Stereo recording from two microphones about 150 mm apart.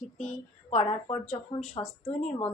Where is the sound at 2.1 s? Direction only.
50° left (ahead or behind).